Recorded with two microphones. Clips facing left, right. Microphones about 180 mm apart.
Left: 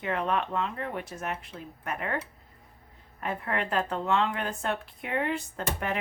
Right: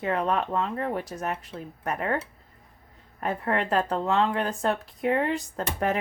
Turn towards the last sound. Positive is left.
turn(degrees=-40)  # may be behind; listen again after turning